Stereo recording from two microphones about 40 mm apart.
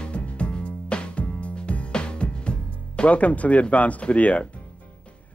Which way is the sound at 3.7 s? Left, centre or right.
Left.